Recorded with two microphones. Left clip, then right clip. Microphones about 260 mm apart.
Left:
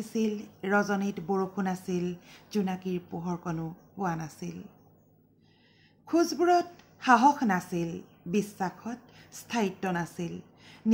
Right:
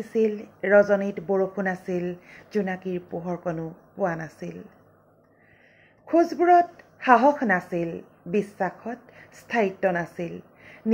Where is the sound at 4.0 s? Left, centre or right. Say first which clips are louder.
Right 6 dB; left.